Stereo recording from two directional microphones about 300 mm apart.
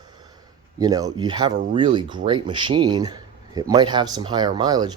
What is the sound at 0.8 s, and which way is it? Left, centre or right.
Speech, centre.